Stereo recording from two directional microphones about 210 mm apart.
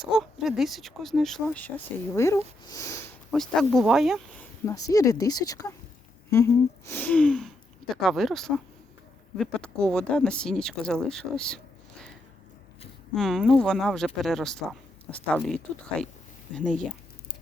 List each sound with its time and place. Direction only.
0.1 s speech: centre (ahead or behind); by 3.0 s 15° left (ahead or behind)
3.3 s speech: centre (ahead or behind)
4.6 s speech: 15° left (ahead or behind)
13.1 s speech: centre (ahead or behind)